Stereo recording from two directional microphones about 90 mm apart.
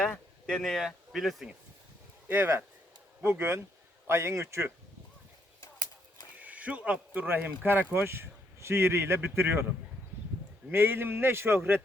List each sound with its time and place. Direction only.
0.0 s speech: 5° left (ahead or behind)
2.2 s a man's voice: 25° right (ahead or behind)
6.4 s speech: 15° right (ahead or behind)
10.7 s a man's voice: 25° right (ahead or behind)